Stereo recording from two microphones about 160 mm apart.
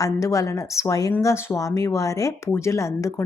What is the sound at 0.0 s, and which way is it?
Speech, 20° left (ahead or behind).